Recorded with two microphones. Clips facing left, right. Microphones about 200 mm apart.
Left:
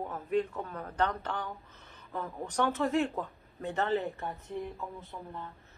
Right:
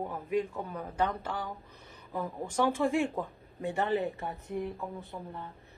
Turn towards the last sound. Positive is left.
turn(degrees=-15)  # may be behind; listen again after turning